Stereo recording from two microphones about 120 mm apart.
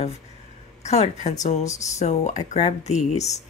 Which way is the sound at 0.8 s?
65° left (ahead or behind).